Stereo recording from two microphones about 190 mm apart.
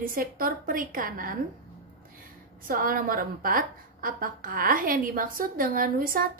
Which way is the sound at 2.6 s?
50° right (ahead or behind).